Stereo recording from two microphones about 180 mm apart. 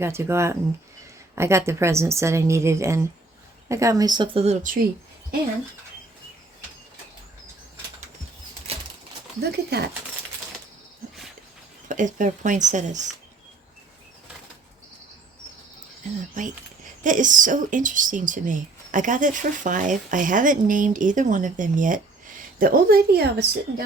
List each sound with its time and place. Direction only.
0.0 s a woman's voice: 15° right (ahead or behind); by 4.5 s 30° right (ahead or behind)
8.7 s bird flight: 35° right (ahead or behind)
9.4 s speech: 65° right (ahead or behind)
11.9 s speech: 45° right (ahead or behind)
16.4 s speech: 45° right (ahead or behind); by 23.8 s 60° right (ahead or behind)